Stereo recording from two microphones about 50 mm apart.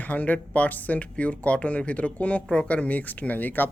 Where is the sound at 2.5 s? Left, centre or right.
Centre.